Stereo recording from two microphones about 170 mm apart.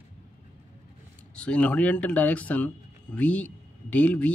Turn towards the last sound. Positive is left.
turn(degrees=10)  # may be behind; listen again after turning